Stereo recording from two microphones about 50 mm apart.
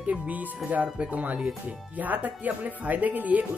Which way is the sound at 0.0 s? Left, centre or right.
Right.